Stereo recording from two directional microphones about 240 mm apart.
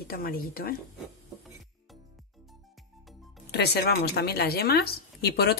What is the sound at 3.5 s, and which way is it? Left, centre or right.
Speech, left.